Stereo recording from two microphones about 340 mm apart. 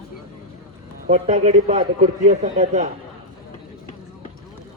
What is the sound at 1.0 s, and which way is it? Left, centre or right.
A man's voice, centre.